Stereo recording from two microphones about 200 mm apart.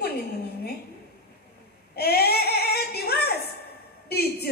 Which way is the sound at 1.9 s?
50° left (ahead or behind).